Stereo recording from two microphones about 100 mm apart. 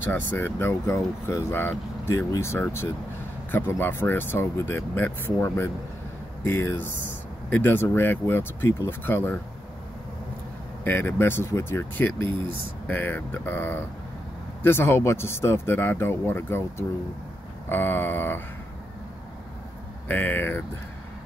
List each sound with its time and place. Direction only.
0.0 s speech: 20° left (ahead or behind)
10.8 s speech: 20° left (ahead or behind)
20.1 s speech: 20° left (ahead or behind)